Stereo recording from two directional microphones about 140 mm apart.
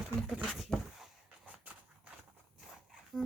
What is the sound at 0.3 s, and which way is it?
Speech, 5° right (ahead or behind).